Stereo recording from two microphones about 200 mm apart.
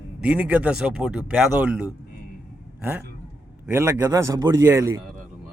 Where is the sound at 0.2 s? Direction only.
5° right (ahead or behind).